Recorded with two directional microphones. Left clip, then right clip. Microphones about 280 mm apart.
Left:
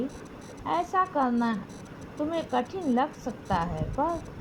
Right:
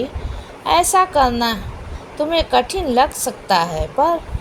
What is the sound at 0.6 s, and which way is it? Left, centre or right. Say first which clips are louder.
Speech: right 12 dB; left.